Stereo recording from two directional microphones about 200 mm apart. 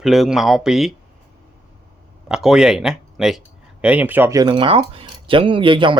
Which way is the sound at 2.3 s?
5° right (ahead or behind).